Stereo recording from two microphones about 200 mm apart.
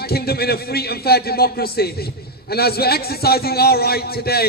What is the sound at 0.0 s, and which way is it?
A man's voice, 50° left (ahead or behind).